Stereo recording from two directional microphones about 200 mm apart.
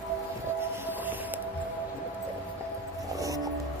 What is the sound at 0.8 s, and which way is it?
Civil defense siren, 10° right (ahead or behind).